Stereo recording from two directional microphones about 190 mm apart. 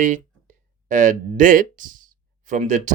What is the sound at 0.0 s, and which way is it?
Speech, 40° right (ahead or behind).